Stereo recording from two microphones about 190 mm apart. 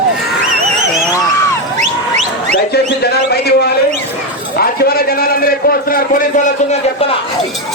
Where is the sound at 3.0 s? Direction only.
60° left (ahead or behind); by 7.1 s 40° left (ahead or behind).